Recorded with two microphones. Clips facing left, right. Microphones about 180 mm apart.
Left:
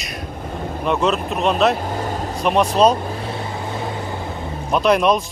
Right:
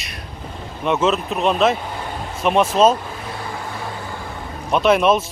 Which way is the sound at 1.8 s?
40° left (ahead or behind).